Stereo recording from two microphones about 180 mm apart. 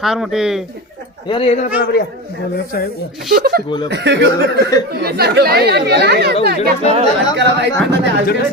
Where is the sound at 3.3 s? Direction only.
55° right (ahead or behind).